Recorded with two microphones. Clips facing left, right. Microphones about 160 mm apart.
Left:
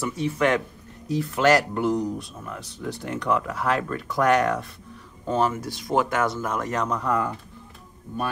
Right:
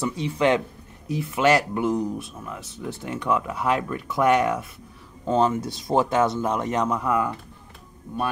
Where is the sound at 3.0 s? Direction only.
10° right (ahead or behind).